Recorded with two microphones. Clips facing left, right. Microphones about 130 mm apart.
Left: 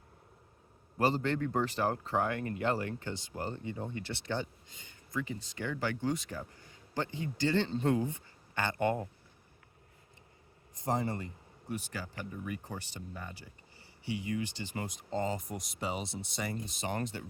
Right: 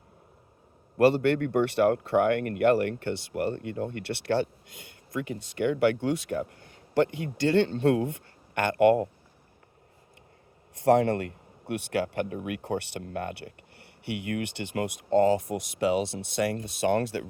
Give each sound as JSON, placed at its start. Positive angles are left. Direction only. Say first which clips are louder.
{"t": 0.9, "sound": "speech", "louder": "right 9 dB", "side_deg": -70}
{"t": 10.8, "sound": "speech", "louder": "right 12 dB", "side_deg": -70}